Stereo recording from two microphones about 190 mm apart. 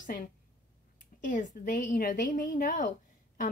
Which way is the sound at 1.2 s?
45° left (ahead or behind).